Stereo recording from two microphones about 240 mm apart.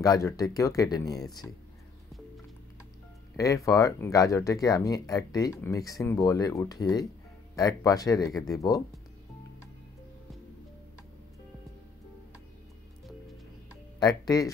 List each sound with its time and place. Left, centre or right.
0.0 s speech: centre
3.3 s speech: centre
13.9 s speech: centre